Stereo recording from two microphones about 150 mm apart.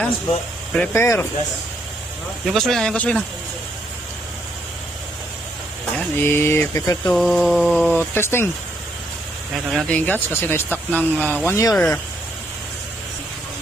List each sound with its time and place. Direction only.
0.7 s speech: 10° left (ahead or behind)
2.5 s mantra: centre (ahead or behind)
6.1 s speech: 15° left (ahead or behind)
7.1 s mantra: 5° left (ahead or behind)
7.9 s speech: 15° left (ahead or behind)
9.6 s speech: 5° left (ahead or behind); by 11.9 s 20° left (ahead or behind)